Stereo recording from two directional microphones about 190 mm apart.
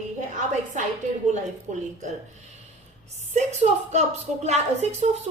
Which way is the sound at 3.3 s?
35° right (ahead or behind).